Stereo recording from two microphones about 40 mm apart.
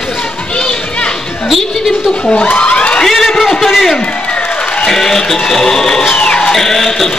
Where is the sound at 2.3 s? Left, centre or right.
Left.